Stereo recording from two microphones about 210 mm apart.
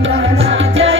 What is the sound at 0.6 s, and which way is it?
Music, 65° right (ahead or behind).